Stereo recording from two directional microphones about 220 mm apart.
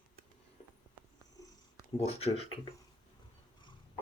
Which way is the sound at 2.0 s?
30° left (ahead or behind).